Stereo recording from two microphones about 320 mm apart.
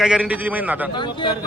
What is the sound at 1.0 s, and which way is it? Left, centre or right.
Speech, centre.